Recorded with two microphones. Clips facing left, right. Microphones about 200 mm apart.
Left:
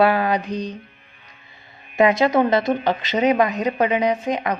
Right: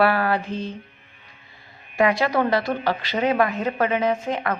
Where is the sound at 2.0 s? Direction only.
20° left (ahead or behind).